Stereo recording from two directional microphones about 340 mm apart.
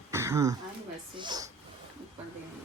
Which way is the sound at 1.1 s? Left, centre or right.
Centre.